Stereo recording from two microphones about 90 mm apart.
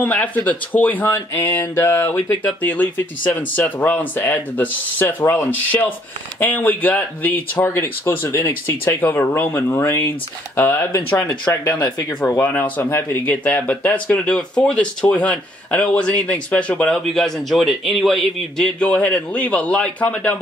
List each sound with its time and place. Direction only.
0.0 s speech: 15° left (ahead or behind)
16.9 s speech: 5° left (ahead or behind)
18.8 s speech: 15° left (ahead or behind)